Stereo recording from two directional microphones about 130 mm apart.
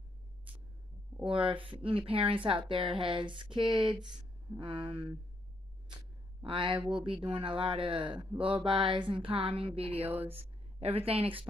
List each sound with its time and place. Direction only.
1.2 s speech: 40° right (ahead or behind)
6.4 s speech: 40° right (ahead or behind)
10.0 s speech: 15° right (ahead or behind)
10.3 s speech: 50° right (ahead or behind)